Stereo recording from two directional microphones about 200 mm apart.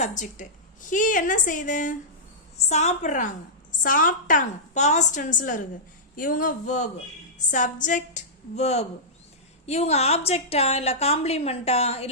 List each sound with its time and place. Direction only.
0.0 s a woman's voice: 40° left (ahead or behind)